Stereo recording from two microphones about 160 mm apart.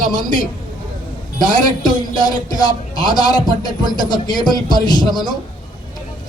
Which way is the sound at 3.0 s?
25° left (ahead or behind).